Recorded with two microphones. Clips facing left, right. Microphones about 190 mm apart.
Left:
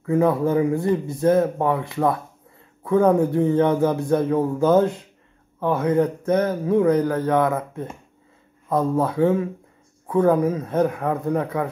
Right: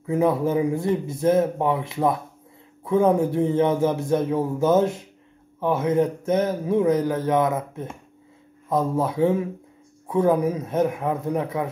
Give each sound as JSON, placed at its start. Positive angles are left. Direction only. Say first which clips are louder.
{"t": 0.0, "sound": "speech", "louder": "left 2 dB", "side_deg": -20}